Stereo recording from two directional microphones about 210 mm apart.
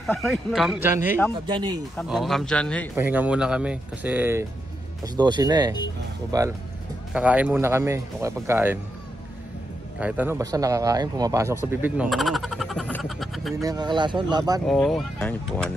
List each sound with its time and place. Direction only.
0.0 s speech: centre (ahead or behind)
1.3 s speech: 25° right (ahead or behind)
2.0 s speech: centre (ahead or behind)
3.0 s speech: 10° right (ahead or behind)
7.1 s speech: 5° right (ahead or behind)
9.9 s a man's voice: 5° right (ahead or behind)
13.6 s speech: 20° right (ahead or behind)
14.7 s speech: centre (ahead or behind)